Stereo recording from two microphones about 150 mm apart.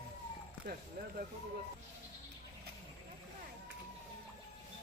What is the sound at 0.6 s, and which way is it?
Speech, 75° right (ahead or behind).